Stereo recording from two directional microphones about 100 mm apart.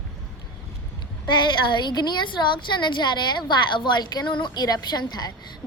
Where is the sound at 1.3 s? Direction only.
50° left (ahead or behind).